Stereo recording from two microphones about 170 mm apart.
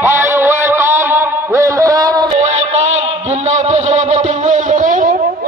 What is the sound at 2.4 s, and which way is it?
Music, 40° right (ahead or behind).